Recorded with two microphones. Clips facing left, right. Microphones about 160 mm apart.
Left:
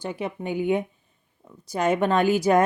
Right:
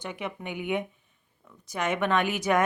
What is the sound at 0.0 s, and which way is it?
Speech, 35° left (ahead or behind).